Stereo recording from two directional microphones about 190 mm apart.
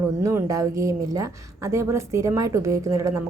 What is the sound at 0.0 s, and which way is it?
A woman's voice, 15° right (ahead or behind).